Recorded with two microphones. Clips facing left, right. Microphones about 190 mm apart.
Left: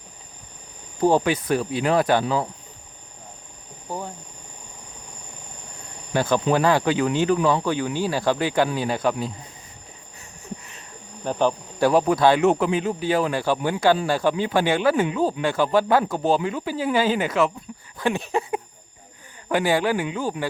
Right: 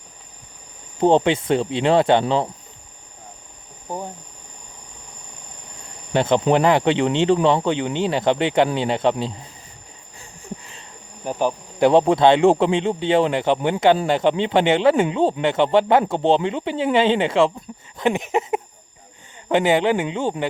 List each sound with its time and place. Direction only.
0.9 s speech: 25° right (ahead or behind)
3.8 s speech: 20° right (ahead or behind)
6.1 s speech: 25° right (ahead or behind)
10.2 s a sound: 30° right (ahead or behind)
11.2 s speech: 10° right (ahead or behind)
11.9 s speech: 25° right (ahead or behind)
17.9 s a sound: 20° right (ahead or behind)
19.5 s speech: 20° right (ahead or behind)